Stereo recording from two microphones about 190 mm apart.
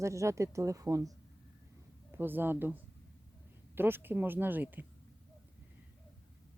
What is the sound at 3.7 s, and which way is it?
A woman's voice, 10° right (ahead or behind).